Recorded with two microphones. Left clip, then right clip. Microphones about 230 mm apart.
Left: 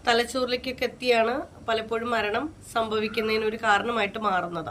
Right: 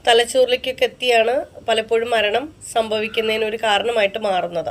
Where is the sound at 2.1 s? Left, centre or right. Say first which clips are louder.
Right 8 dB; centre.